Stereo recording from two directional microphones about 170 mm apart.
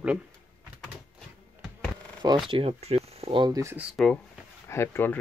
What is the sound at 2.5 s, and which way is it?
Speech, 35° right (ahead or behind).